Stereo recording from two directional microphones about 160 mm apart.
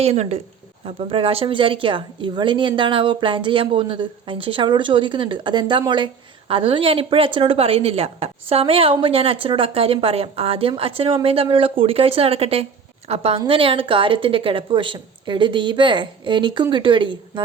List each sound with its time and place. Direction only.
0.0 s a woman's voice: 40° right (ahead or behind)